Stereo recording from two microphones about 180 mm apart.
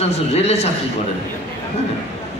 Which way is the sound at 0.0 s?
35° left (ahead or behind).